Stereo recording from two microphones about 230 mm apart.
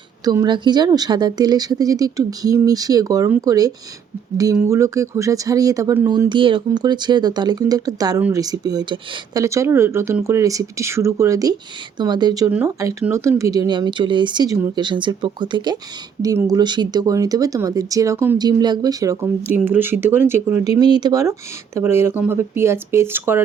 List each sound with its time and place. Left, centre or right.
0.3 s speech: centre